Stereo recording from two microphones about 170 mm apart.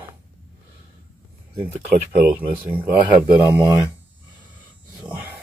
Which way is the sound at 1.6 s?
35° right (ahead or behind).